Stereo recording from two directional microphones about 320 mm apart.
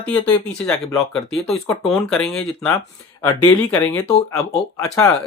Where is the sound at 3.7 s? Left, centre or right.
Centre.